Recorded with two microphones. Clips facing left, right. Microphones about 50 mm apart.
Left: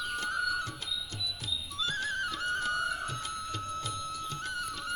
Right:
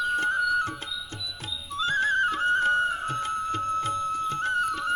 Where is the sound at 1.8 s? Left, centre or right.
Right.